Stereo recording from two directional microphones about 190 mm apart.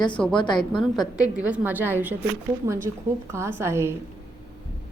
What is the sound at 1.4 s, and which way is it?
A woman's voice, 5° right (ahead or behind).